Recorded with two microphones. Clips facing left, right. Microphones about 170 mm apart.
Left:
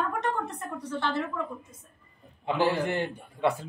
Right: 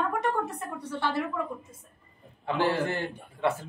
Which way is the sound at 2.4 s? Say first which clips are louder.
Left 1 dB; 15° left (ahead or behind).